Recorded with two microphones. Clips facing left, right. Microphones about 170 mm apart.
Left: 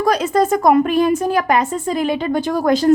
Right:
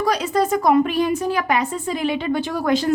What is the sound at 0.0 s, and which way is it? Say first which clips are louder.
A woman's voice: left 4 dB; 50° left (ahead or behind).